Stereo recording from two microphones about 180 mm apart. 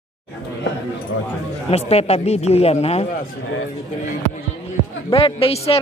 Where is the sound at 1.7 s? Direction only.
35° left (ahead or behind).